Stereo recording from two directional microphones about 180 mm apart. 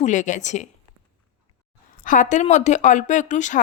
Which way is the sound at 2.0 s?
45° left (ahead or behind).